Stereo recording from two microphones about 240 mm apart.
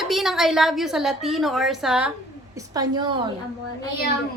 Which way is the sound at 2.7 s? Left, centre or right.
Centre.